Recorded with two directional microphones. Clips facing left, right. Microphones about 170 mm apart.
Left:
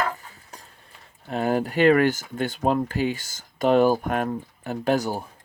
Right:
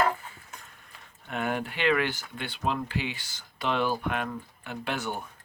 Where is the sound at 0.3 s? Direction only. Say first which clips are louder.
Left 2 dB; 35° left (ahead or behind).